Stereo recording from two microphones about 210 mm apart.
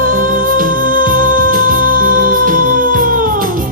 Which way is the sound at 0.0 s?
40° right (ahead or behind).